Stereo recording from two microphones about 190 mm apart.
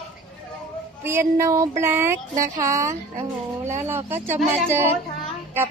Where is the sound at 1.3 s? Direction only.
15° right (ahead or behind).